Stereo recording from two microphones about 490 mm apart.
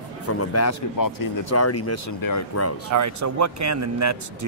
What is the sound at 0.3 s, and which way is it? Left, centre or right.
Speech, left.